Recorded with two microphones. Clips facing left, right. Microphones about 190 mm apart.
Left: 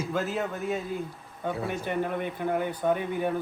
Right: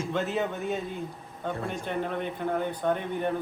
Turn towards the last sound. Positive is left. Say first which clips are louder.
# left 1 dB
turn(degrees=10)  # may be behind; listen again after turning